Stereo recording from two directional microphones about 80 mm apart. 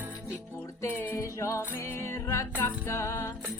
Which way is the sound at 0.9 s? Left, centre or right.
Left.